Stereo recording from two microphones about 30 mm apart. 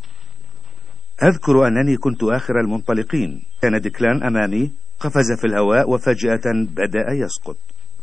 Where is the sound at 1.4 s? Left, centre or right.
Centre.